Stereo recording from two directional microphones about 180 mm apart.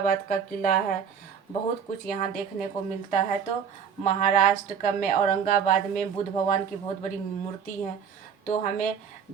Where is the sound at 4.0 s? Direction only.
45° left (ahead or behind).